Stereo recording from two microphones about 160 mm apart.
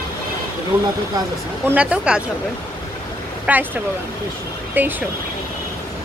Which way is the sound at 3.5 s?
10° right (ahead or behind).